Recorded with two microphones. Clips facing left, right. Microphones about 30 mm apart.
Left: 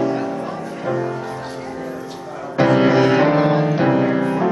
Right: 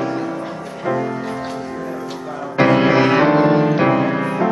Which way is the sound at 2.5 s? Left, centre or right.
Right.